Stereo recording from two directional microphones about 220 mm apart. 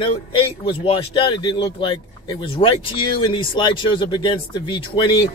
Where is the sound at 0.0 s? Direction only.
20° left (ahead or behind).